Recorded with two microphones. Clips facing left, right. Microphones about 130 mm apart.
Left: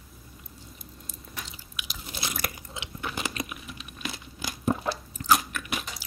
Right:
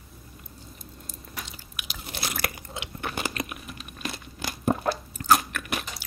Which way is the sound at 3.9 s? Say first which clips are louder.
Right 2 dB; 50° right (ahead or behind).